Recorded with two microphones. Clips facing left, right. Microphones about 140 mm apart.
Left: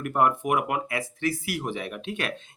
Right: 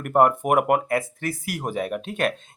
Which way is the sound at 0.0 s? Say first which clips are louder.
Right 5 dB; 45° right (ahead or behind).